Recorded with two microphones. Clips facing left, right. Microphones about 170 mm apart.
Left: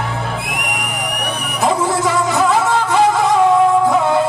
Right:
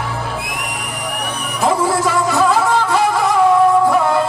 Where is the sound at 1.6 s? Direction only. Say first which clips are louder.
Even; 20° left (ahead or behind).